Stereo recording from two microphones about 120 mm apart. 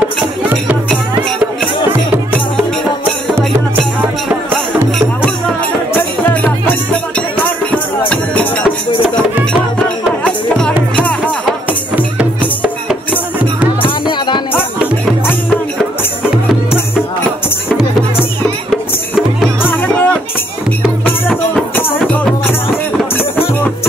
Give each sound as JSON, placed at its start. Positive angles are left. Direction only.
{"t": 4.0, "sound": "music", "side_deg": -15}
{"t": 13.8, "sound": "music", "side_deg": 40}
{"t": 18.7, "sound": "music", "side_deg": 0}
{"t": 19.6, "sound": "music", "side_deg": 15}
{"t": 21.7, "sound": "music", "side_deg": 10}